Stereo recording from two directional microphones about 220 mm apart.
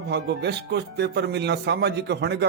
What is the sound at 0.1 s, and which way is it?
Speech, 50° right (ahead or behind).